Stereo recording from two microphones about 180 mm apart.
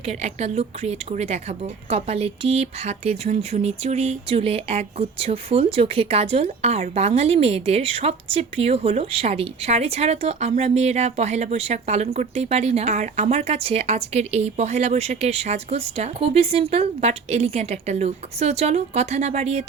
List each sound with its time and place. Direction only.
0.0 s a woman's voice: 35° right (ahead or behind)